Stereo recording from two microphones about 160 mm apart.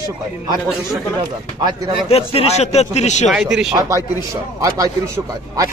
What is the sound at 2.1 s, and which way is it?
A man's voice, 40° left (ahead or behind).